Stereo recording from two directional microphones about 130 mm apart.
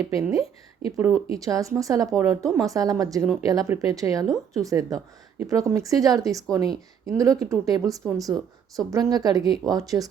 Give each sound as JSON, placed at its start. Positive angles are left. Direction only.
{"t": 0.0, "sound": "a woman's voice", "side_deg": -25}